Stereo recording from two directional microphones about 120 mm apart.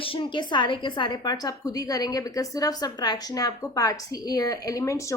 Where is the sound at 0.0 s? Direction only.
45° left (ahead or behind).